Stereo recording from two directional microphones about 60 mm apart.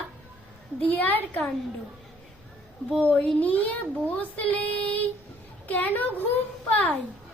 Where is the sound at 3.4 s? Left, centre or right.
Left.